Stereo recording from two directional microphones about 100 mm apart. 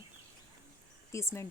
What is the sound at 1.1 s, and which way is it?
Speech, 25° left (ahead or behind).